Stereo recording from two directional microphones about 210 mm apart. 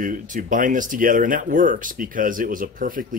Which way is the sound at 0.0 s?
40° right (ahead or behind).